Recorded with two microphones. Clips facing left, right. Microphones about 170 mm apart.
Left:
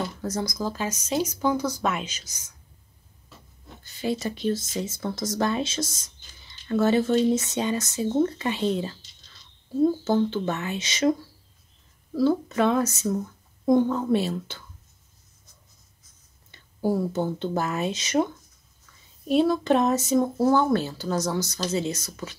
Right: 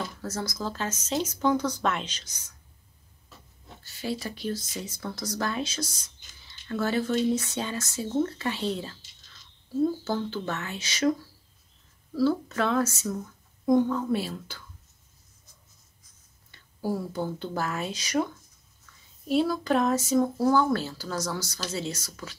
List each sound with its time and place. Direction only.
0.2 s speech: 15° left (ahead or behind)
3.8 s speech: 20° left (ahead or behind)
16.5 s speech: 25° left (ahead or behind)